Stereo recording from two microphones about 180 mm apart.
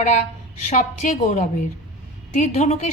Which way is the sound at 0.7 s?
45° left (ahead or behind).